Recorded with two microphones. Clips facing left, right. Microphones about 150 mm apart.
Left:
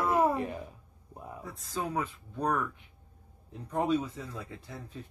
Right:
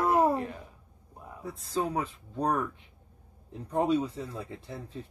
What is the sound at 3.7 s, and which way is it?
Speech, 25° right (ahead or behind).